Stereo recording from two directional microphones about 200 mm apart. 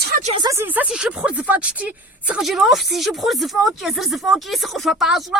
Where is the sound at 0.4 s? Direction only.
10° right (ahead or behind).